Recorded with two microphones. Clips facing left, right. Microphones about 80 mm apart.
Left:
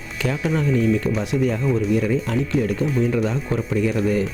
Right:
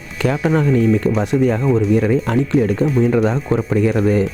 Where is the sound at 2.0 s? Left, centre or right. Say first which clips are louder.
Right 5 dB; right.